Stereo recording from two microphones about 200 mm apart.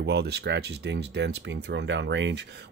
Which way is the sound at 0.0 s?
55° right (ahead or behind).